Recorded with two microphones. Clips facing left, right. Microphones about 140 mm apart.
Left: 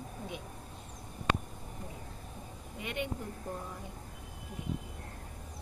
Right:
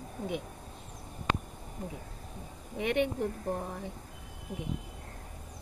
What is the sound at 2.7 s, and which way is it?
Speech, 65° right (ahead or behind).